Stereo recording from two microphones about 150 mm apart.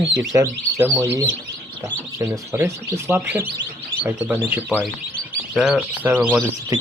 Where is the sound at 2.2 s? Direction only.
15° right (ahead or behind).